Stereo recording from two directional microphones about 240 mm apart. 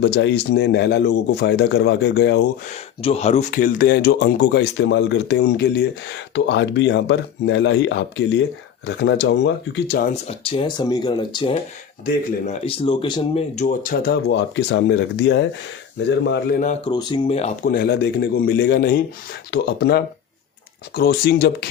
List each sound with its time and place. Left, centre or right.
0.0 s speech: left
3.0 s speech: left
13.6 s speech: left
16.9 s speech: centre
17.7 s speech: left